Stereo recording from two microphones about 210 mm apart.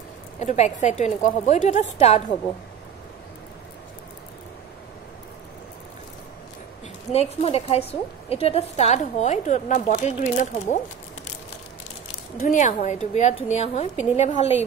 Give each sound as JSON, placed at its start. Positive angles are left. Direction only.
{"t": 0.4, "sound": "a woman's voice", "side_deg": 35}
{"t": 7.1, "sound": "a woman's voice", "side_deg": 30}
{"t": 12.4, "sound": "a woman's voice", "side_deg": 35}